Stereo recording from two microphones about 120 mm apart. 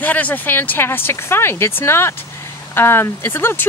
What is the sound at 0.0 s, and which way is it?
Speech, 15° left (ahead or behind).